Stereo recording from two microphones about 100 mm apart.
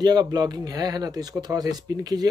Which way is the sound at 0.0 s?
45° right (ahead or behind).